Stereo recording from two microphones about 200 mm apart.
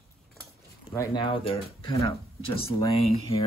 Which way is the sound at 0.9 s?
20° left (ahead or behind).